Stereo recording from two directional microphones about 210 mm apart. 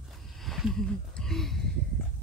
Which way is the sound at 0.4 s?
Centre (ahead or behind).